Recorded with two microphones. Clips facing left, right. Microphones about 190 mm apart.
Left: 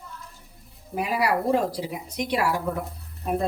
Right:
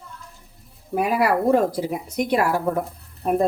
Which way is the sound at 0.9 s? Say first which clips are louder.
Right 4 dB; 50° right (ahead or behind).